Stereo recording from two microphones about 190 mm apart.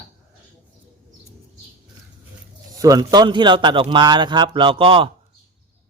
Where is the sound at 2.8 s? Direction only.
20° right (ahead or behind).